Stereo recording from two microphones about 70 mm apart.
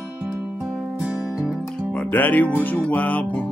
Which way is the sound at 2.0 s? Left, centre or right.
Left.